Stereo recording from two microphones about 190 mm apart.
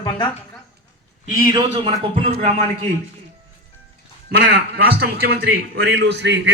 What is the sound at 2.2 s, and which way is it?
Speech, 35° right (ahead or behind).